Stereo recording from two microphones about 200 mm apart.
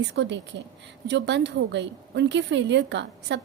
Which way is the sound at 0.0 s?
60° right (ahead or behind).